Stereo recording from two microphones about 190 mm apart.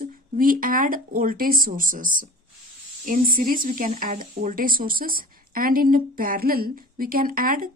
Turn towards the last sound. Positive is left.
turn(degrees=-50)  # may be behind; listen again after turning